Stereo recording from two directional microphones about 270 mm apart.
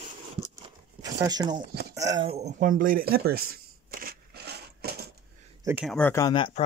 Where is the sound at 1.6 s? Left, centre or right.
Right.